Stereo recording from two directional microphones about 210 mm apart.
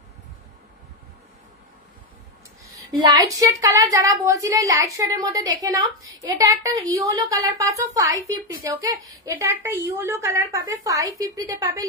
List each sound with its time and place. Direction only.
3.0 s a woman's voice: 20° right (ahead or behind)